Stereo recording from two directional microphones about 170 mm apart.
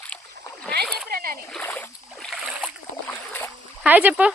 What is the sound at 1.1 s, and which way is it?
Splash, 60° right (ahead or behind).